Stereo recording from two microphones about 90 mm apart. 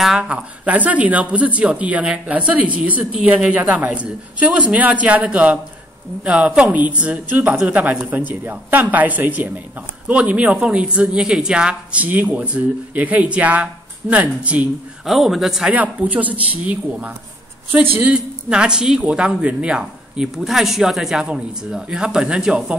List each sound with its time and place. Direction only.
0.0 s speech: 10° right (ahead or behind)
15.0 s a man's voice: centre (ahead or behind)
15.7 s speech: 15° right (ahead or behind)